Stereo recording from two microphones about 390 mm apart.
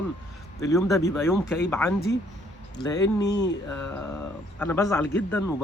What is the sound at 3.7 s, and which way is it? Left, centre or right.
Speech, centre.